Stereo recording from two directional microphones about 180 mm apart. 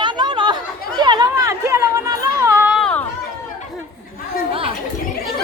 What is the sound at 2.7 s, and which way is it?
Chatter, 5° left (ahead or behind).